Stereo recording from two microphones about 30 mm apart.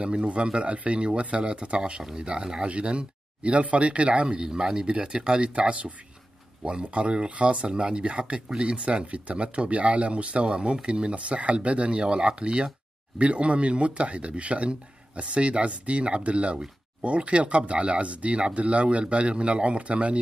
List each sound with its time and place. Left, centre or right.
0.0 s speech: right
4.3 s speech: right
5.5 s speech: right
12.0 s speech: right